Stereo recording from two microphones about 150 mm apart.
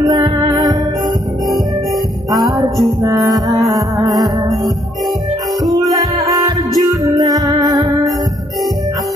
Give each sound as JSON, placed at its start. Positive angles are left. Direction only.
{"t": 0.0, "sound": "music", "side_deg": -25}
{"t": 2.5, "sound": "music", "side_deg": -25}
{"t": 5.6, "sound": "music", "side_deg": -25}